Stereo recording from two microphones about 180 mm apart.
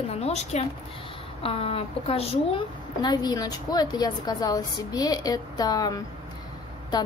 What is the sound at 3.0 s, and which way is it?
A woman's voice, 25° left (ahead or behind).